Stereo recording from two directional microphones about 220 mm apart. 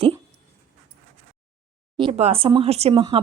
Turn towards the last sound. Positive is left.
turn(degrees=-20)  # may be behind; listen again after turning